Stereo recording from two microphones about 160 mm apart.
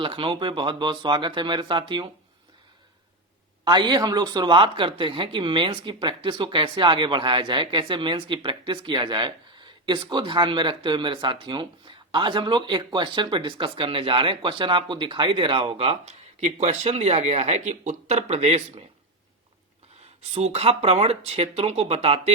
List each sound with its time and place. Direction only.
0.0 s speech: 35° right (ahead or behind)
3.6 s speech: 30° right (ahead or behind)
20.2 s speech: 45° right (ahead or behind)